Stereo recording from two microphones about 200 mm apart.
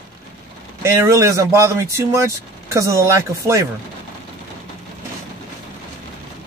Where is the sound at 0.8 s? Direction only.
15° right (ahead or behind).